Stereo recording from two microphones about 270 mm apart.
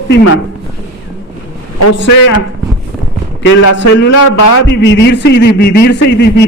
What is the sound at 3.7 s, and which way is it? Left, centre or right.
A man's voice, left.